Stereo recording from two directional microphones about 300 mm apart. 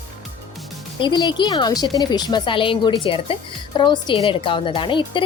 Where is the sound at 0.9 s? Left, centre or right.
Centre.